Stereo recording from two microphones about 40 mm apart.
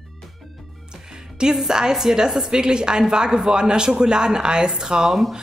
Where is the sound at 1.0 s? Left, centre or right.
Centre.